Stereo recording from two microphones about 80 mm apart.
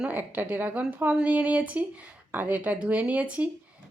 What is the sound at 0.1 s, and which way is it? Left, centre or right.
Speech, right.